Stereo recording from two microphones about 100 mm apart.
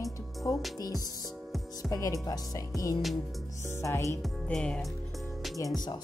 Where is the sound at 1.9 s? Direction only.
35° left (ahead or behind).